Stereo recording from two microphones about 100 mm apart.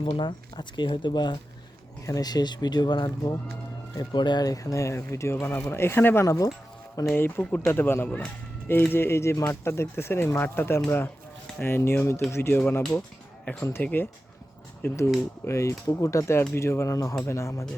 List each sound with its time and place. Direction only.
0.2 s speech: 50° left (ahead or behind); by 6.2 s 20° left (ahead or behind)
6.2 s speech: 35° left (ahead or behind)
7.1 s speech: 20° left (ahead or behind)